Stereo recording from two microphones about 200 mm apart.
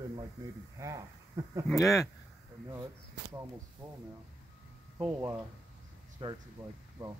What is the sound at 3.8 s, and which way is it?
Speech, 25° right (ahead or behind).